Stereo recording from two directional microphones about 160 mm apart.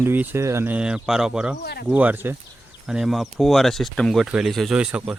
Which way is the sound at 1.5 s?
85° left.